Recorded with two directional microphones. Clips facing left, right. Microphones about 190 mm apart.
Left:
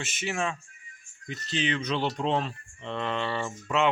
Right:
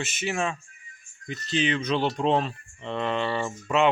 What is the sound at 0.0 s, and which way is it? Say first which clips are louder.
Speech: right 3 dB; 10° right (ahead or behind).